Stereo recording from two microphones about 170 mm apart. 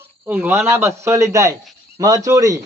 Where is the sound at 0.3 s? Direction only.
10° right (ahead or behind).